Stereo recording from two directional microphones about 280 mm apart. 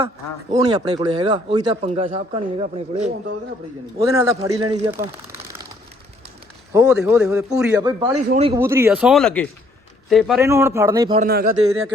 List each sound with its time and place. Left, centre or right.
0.5 s speech: centre
4.9 s speech: centre
6.7 s speech: centre
11.2 s speech: right